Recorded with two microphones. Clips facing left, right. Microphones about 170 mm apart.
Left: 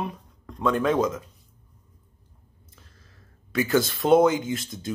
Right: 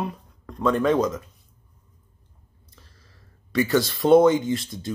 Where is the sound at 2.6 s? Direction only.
Centre (ahead or behind).